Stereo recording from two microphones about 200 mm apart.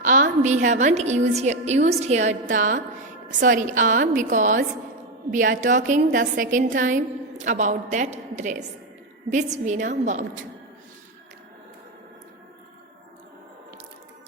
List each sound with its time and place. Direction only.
0.0 s a woman's voice: 40° right (ahead or behind)